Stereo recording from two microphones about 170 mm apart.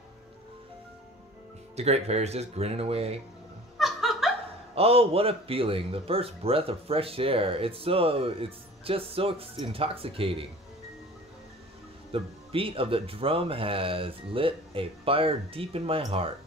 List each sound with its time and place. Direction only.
1.8 s a man's voice: 40° right (ahead or behind)
3.7 s laughter: centre (ahead or behind)
4.7 s a man's voice: 35° right (ahead or behind)
12.1 s a man's voice: 30° right (ahead or behind)